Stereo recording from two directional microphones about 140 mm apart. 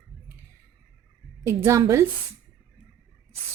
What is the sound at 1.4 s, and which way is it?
Speech, 20° right (ahead or behind).